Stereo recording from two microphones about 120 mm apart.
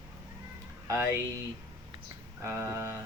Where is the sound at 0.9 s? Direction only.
25° right (ahead or behind).